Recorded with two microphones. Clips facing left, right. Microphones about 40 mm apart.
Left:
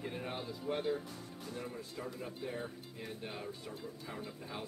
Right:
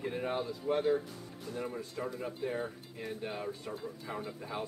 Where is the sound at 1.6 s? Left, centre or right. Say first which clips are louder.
Right 6 dB; right.